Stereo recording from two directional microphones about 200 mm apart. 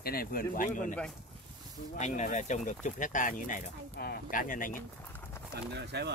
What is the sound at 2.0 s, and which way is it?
Speech, 35° left (ahead or behind).